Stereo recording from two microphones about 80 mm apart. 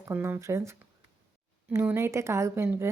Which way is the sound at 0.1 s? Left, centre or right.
Right.